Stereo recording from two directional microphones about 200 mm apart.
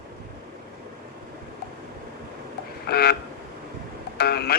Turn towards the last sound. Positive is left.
turn(degrees=50)  # may be behind; listen again after turning